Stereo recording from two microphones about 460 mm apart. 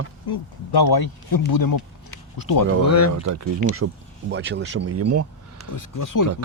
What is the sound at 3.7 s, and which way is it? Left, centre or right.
Speech, right.